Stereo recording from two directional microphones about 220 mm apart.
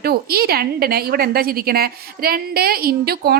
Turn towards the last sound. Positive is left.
turn(degrees=-45)  # may be behind; listen again after turning